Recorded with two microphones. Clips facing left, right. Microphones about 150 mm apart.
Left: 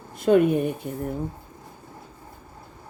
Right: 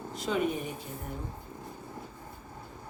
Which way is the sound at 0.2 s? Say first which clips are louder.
Left 12 dB; 55° left (ahead or behind).